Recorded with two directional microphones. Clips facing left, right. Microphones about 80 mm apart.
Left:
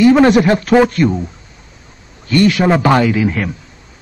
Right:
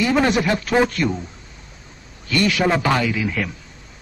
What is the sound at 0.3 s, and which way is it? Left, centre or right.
Speech, left.